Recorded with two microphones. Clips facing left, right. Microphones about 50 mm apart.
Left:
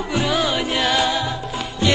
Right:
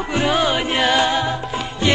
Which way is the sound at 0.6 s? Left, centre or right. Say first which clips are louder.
Right 2 dB; right.